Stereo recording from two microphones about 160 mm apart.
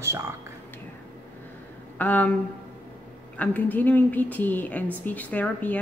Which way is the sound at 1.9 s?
10° left (ahead or behind).